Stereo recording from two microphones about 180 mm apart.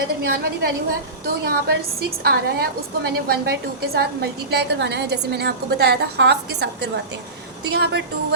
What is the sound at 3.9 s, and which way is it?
A woman's voice, 65° right (ahead or behind).